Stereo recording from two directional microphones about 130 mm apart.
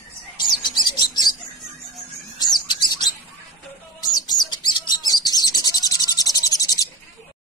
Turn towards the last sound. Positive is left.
turn(degrees=30)  # may be behind; listen again after turning